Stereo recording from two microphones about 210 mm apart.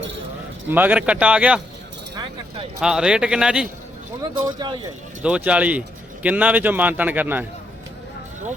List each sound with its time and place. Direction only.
0.7 s speech: 10° right (ahead or behind)
2.8 s speech: 5° right (ahead or behind)
4.2 s speech: 20° right (ahead or behind)
5.2 s a man's voice: 5° right (ahead or behind)